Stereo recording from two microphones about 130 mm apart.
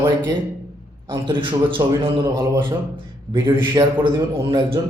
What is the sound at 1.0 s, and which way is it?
A man's voice, 40° right (ahead or behind).